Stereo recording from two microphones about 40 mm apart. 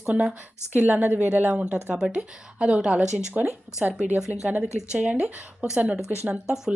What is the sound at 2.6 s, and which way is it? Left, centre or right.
Speech, right.